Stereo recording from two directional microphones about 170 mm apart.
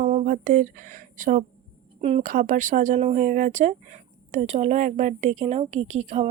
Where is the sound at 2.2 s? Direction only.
50° right (ahead or behind).